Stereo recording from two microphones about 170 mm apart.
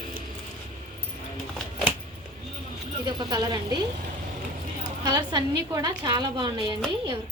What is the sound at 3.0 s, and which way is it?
Speech, 25° right (ahead or behind).